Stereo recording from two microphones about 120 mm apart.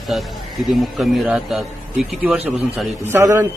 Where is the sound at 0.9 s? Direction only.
5° right (ahead or behind).